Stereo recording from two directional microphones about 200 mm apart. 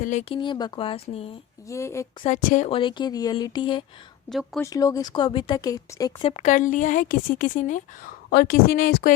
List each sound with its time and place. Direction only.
0.0 s speech: 35° left (ahead or behind)
0.3 s speech: 20° left (ahead or behind)
1.6 s a woman's voice: 15° left (ahead or behind)
2.2 s speech: 35° left (ahead or behind)
4.3 s speech: centre (ahead or behind)
4.6 s speech: 15° left (ahead or behind)
6.3 s speech: 35° left (ahead or behind)